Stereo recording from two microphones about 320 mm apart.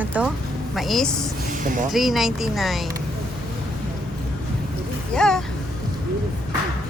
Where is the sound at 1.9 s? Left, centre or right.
Centre.